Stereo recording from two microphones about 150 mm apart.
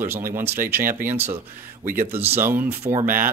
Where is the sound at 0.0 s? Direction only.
15° right (ahead or behind).